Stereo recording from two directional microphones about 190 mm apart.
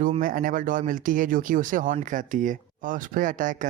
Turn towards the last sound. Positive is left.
turn(degrees=-45)  # may be behind; listen again after turning